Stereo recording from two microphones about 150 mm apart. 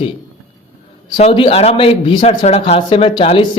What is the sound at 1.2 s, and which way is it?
A man's voice, 40° left (ahead or behind).